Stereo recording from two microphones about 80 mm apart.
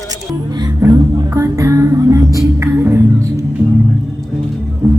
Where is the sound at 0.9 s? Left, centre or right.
Right.